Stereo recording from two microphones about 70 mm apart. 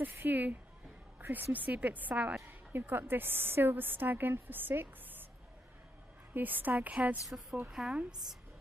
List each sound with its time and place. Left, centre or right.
0.0 s a woman's voice: right
2.4 s a woman's voice: right
6.3 s a woman's voice: right
7.7 s a woman's voice: centre